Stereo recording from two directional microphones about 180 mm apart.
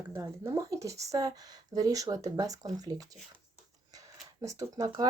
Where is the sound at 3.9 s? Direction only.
20° right (ahead or behind).